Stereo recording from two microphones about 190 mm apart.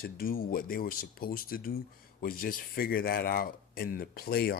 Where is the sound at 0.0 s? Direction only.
50° left (ahead or behind).